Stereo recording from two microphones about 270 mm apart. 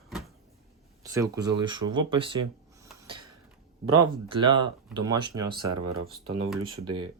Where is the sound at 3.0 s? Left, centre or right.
Centre.